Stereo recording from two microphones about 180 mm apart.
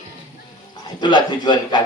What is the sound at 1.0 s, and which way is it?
Speech, 25° left (ahead or behind).